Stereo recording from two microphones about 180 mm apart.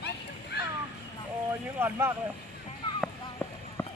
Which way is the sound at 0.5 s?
70° left (ahead or behind).